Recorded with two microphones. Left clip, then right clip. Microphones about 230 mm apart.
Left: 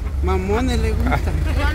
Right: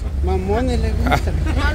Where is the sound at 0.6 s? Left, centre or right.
Left.